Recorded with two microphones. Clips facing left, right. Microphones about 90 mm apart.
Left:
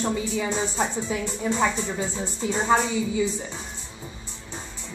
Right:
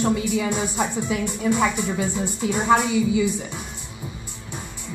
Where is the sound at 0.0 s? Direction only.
15° right (ahead or behind).